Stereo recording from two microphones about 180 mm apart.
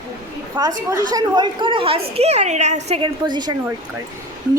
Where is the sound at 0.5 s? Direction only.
20° right (ahead or behind); by 3.0 s 40° right (ahead or behind).